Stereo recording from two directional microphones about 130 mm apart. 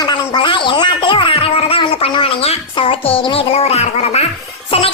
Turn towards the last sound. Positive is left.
turn(degrees=45)  # may be behind; listen again after turning